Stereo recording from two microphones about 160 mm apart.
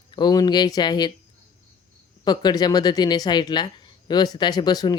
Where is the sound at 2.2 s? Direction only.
25° left (ahead or behind).